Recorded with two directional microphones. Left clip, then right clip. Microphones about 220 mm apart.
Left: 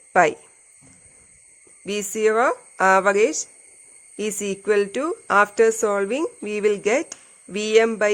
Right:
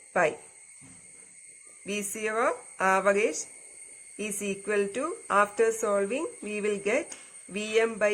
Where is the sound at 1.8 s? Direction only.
50° left (ahead or behind).